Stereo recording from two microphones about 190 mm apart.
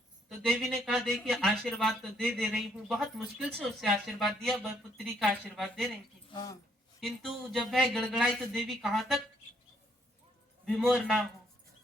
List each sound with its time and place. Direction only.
0.3 s speech: centre (ahead or behind)
6.3 s speech: 20° left (ahead or behind)
7.0 s speech: centre (ahead or behind)
10.7 s speech: centre (ahead or behind)